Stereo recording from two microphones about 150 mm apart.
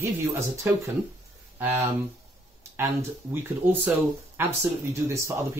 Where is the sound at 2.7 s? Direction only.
15° right (ahead or behind).